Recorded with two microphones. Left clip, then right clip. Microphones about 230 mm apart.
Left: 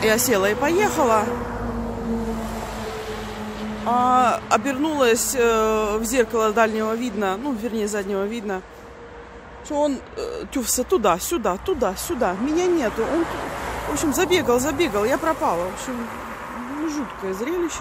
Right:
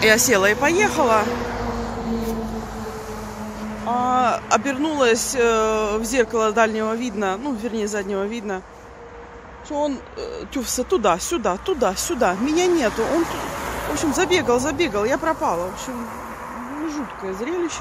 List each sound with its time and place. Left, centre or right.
0.0 s speech: centre
1.3 s vehicle: right
3.8 s speech: centre
9.7 s speech: centre
12.9 s speech: right
13.9 s speech: centre